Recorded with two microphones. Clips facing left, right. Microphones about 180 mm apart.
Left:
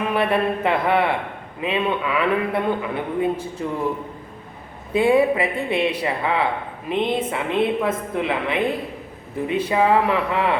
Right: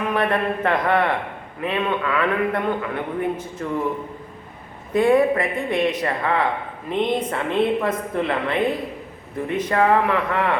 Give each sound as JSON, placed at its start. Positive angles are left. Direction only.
{"t": 0.1, "sound": "a man's voice", "side_deg": 10}
{"t": 4.9, "sound": "a man's voice", "side_deg": 5}